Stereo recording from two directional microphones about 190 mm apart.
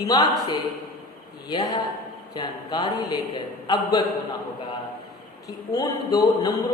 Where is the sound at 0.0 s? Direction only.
20° left (ahead or behind).